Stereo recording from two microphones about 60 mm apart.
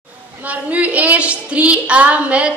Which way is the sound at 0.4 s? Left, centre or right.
Right.